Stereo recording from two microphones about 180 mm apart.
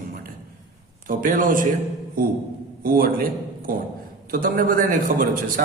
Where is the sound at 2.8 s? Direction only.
55° right (ahead or behind).